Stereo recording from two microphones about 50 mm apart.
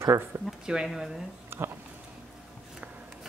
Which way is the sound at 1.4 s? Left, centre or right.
Right.